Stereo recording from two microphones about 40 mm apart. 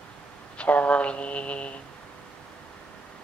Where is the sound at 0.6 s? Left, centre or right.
Left.